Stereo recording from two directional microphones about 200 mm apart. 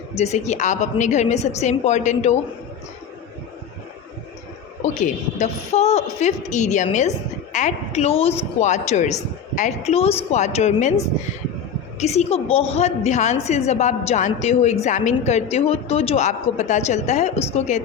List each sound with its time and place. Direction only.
0.2 s a woman's voice: 35° left (ahead or behind)
4.8 s a woman's voice: 35° left (ahead or behind)